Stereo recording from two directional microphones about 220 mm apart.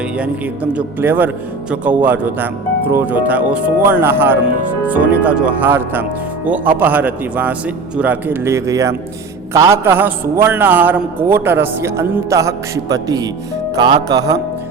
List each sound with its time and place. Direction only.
0.2 s a man's voice: 5° right (ahead or behind)